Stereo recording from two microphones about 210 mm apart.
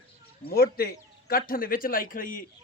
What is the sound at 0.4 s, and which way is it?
A man's voice, 45° left (ahead or behind).